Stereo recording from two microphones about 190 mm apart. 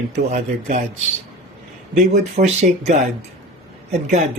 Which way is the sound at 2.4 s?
40° right (ahead or behind).